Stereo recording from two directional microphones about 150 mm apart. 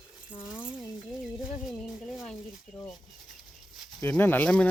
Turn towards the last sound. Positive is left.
turn(degrees=10)  # may be behind; listen again after turning